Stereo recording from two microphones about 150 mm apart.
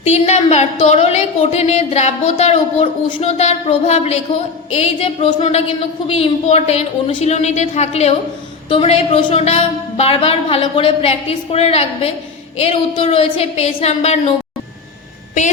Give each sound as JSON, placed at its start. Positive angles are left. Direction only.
{"t": 0.0, "sound": "a woman's voice", "side_deg": 45}